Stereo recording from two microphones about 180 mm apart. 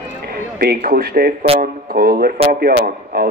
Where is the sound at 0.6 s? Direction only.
55° right (ahead or behind).